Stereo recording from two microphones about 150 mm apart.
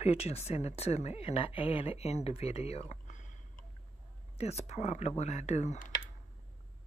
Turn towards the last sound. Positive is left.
turn(degrees=50)  # may be behind; listen again after turning